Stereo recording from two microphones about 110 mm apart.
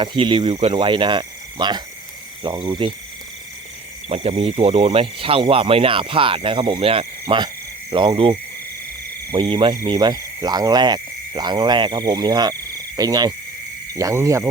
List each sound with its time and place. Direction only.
0.0 s speech: 50° right (ahead or behind)
4.1 s speech: 65° right (ahead or behind)
7.4 s cricket: 45° right (ahead or behind)
9.3 s speech: 45° right (ahead or behind)
9.8 s cricket: 40° right (ahead or behind)
13.9 s speech: 25° right (ahead or behind)